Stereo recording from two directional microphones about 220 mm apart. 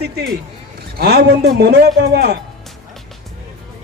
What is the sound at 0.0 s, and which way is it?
A man's voice, 45° right (ahead or behind).